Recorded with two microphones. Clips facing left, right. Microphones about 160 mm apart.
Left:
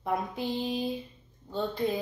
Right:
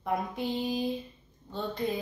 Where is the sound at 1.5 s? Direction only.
Centre (ahead or behind).